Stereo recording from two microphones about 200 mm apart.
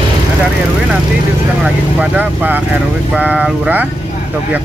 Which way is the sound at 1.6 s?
5° right (ahead or behind).